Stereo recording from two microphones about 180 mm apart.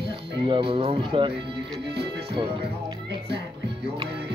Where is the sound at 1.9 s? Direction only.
65° right (ahead or behind).